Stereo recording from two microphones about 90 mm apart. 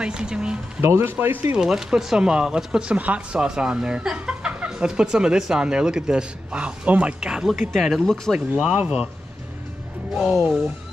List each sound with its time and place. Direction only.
0.0 s speech: 10° right (ahead or behind)
0.7 s speech: 25° right (ahead or behind)
1.6 s speech: 5° right (ahead or behind)
10.1 s speech: centre (ahead or behind)